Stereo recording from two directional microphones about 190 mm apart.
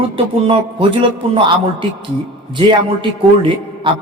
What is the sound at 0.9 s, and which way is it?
Speech, 25° right (ahead or behind).